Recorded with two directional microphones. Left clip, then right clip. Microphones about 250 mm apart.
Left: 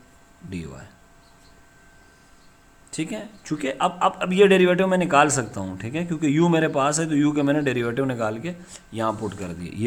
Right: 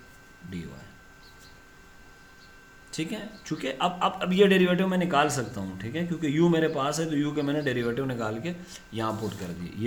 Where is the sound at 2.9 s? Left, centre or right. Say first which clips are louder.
Left 4 dB; left.